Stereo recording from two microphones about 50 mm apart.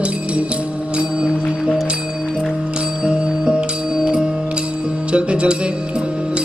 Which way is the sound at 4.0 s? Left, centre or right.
Centre.